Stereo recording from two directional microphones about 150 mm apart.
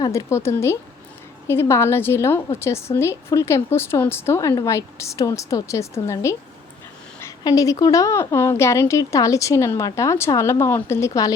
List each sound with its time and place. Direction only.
0.0 s a woman's voice: 20° left (ahead or behind)